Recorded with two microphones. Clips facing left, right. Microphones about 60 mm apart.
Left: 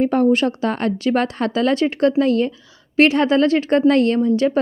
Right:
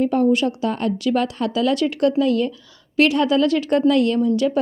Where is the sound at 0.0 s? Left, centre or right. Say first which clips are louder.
Left 2 dB; left.